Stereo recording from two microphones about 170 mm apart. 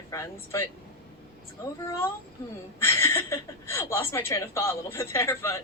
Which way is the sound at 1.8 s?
20° left (ahead or behind).